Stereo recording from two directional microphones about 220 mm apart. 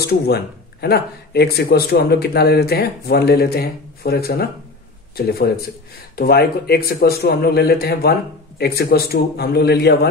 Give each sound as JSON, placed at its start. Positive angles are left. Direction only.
{"t": 0.0, "sound": "speech", "side_deg": 45}